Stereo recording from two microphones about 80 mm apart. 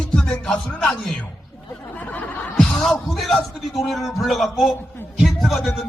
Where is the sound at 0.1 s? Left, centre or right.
Centre.